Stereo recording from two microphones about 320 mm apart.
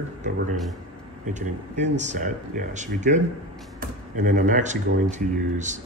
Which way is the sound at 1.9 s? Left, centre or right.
Right.